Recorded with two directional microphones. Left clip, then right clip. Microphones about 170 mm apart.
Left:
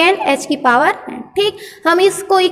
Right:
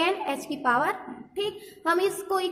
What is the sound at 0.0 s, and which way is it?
A woman's voice, 25° left (ahead or behind).